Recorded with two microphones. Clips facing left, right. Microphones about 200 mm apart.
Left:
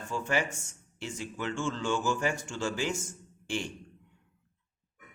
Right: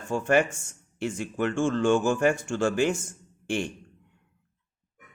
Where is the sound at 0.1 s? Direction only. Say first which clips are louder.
Right 8 dB; 55° right (ahead or behind).